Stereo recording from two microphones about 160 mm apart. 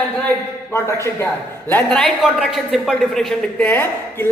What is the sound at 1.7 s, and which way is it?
A man's voice, 5° left (ahead or behind).